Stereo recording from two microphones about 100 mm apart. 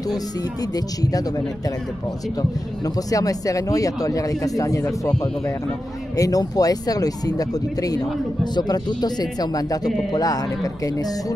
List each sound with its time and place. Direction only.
0.7 s a man's voice: 40° left (ahead or behind)
3.1 s a man's voice: 35° left (ahead or behind)